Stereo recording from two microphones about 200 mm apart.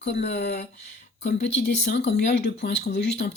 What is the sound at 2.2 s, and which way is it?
Speech, 50° left (ahead or behind).